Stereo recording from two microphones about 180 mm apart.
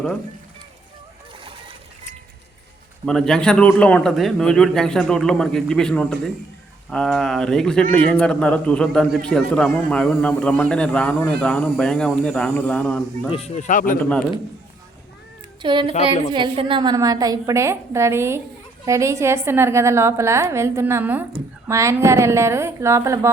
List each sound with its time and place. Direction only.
3.1 s speech: 5° left (ahead or behind)
13.3 s speech: 40° left (ahead or behind)
14.0 s a man's voice: 5° left (ahead or behind)
15.6 s a woman's voice: 25° right (ahead or behind)